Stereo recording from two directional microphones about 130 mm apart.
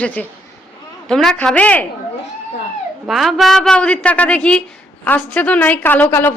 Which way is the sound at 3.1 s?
Centre (ahead or behind).